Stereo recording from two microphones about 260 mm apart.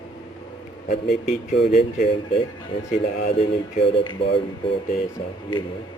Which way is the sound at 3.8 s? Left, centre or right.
Left.